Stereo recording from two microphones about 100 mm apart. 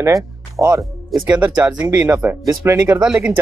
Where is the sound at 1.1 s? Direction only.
45° right (ahead or behind).